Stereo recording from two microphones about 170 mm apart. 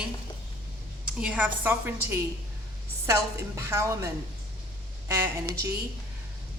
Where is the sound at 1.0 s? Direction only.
5° right (ahead or behind).